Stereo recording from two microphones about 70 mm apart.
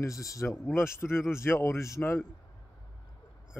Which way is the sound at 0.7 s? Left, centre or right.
Left.